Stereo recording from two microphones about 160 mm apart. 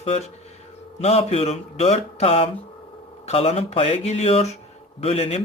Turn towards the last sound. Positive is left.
turn(degrees=40)  # may be behind; listen again after turning